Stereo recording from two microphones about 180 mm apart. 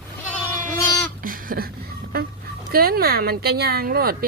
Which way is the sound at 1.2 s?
50° right (ahead or behind).